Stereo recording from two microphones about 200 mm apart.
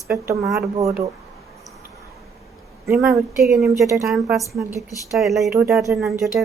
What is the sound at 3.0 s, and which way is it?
Speech, centre (ahead or behind).